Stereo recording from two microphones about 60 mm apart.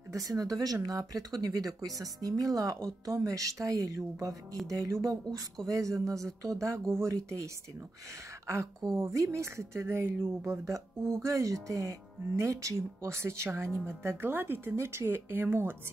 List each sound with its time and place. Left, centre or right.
0.1 s speech: right
8.9 s speech: right
9.9 s speech: right
10.4 s speech: right